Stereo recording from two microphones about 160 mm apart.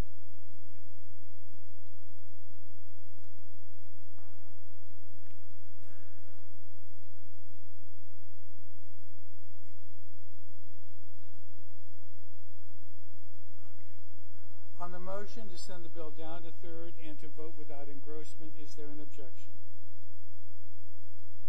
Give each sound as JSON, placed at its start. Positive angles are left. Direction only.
{"t": 14.8, "sound": "speech", "side_deg": 20}